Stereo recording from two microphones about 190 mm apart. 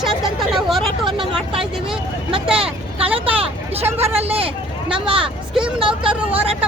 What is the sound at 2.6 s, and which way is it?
Speech, 30° right (ahead or behind).